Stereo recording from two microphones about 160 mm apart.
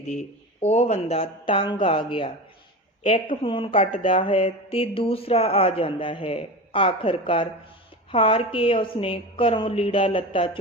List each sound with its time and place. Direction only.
0.1 s speech: 45° left (ahead or behind)